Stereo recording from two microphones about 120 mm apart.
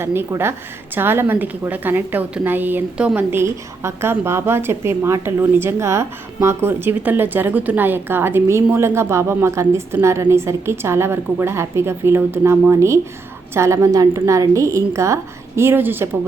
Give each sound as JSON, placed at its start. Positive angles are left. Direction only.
{"t": 0.0, "sound": "a woman's voice", "side_deg": -20}